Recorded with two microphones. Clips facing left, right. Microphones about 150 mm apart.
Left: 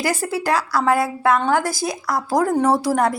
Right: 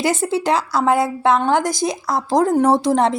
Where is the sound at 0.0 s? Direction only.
25° right (ahead or behind).